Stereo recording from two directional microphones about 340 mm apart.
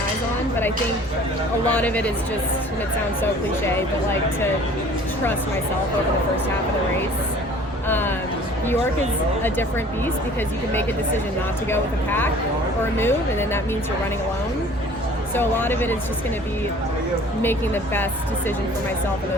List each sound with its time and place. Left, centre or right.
1.7 s speech: centre
7.9 s speech: centre
11.7 s speech: centre
15.4 s speech: centre
17.4 s speech: centre